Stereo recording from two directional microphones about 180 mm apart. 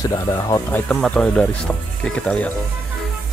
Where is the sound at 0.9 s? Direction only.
5° left (ahead or behind).